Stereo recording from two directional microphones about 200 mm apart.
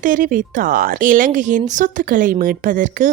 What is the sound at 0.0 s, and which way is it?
Speech, 45° right (ahead or behind).